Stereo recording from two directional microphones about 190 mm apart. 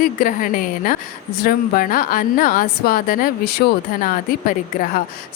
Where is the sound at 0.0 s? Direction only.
45° left (ahead or behind).